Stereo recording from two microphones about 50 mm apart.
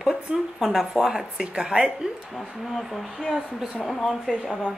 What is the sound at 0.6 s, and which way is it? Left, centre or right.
A woman's voice, centre.